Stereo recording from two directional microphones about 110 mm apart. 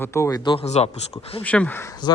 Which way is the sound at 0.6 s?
75° left (ahead or behind).